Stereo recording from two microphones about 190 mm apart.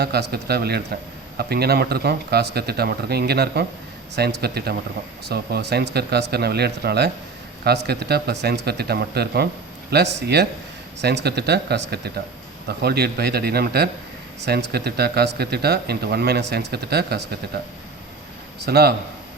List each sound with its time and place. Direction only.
0.0 s speech: 55° right (ahead or behind)
18.6 s speech: 55° right (ahead or behind)